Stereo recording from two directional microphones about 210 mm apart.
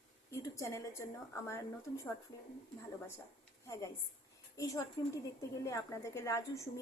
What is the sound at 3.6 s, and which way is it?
A woman's voice, 15° left (ahead or behind).